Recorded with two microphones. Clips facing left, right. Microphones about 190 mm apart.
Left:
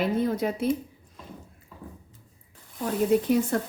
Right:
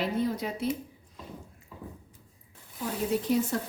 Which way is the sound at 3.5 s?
55° left (ahead or behind).